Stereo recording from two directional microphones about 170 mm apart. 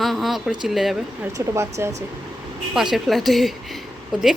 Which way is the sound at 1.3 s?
15° right (ahead or behind).